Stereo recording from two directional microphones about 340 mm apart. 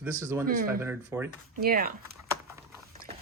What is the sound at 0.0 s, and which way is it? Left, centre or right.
Speech, centre.